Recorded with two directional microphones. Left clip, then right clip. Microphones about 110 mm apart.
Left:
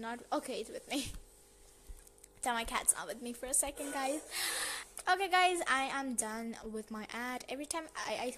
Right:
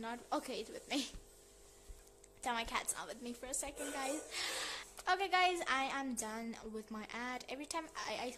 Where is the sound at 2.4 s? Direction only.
25° left (ahead or behind).